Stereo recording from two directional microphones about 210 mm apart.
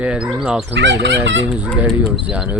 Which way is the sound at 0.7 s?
55° right (ahead or behind).